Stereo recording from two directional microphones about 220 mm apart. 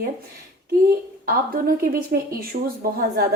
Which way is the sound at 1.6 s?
45° right (ahead or behind).